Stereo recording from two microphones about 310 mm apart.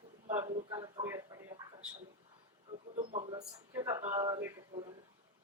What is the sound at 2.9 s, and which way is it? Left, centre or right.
Speech, right.